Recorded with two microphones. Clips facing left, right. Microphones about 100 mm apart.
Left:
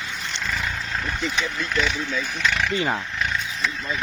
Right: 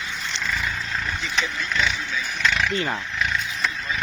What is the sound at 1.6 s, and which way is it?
Speech, 45° left (ahead or behind).